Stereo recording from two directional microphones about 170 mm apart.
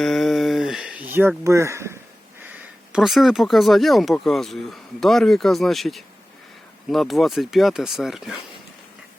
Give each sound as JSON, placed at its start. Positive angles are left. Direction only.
{"t": 0.0, "sound": "a sound", "side_deg": 0}
{"t": 1.1, "sound": "speech", "side_deg": -15}
{"t": 2.9, "sound": "speech", "side_deg": 0}